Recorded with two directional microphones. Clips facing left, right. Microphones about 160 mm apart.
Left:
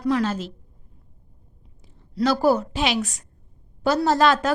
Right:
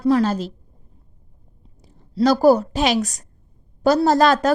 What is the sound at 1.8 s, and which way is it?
A woman's voice, 40° right (ahead or behind).